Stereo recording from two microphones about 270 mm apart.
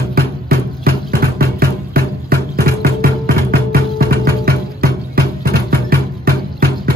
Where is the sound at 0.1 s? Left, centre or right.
Right.